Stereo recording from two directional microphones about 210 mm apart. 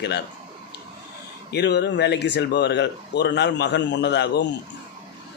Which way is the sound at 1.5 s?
50° left (ahead or behind).